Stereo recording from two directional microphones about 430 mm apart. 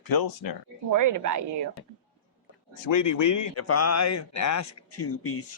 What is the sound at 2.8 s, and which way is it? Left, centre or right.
Speech, left.